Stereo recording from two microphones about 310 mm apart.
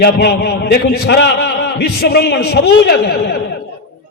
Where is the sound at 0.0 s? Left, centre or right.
Left.